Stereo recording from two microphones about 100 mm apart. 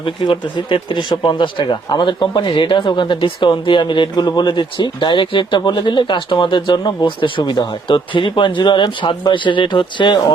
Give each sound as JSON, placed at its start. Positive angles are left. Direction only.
{"t": 0.0, "sound": "speech", "side_deg": 55}